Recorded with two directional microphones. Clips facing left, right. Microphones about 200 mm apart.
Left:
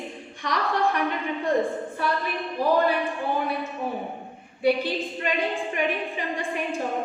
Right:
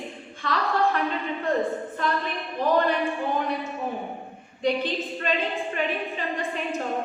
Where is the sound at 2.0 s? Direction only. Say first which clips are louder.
Even; 10° left (ahead or behind).